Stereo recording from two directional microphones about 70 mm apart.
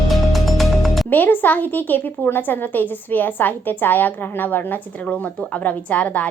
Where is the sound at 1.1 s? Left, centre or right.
Left.